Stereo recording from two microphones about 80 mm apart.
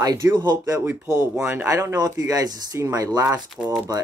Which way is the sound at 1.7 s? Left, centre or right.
Right.